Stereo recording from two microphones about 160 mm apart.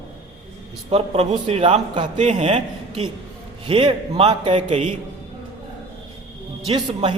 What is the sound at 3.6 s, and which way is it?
A man's voice, 35° right (ahead or behind).